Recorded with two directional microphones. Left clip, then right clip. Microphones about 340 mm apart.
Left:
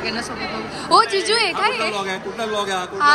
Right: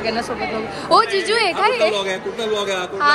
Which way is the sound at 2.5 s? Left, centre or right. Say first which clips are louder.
Even; centre.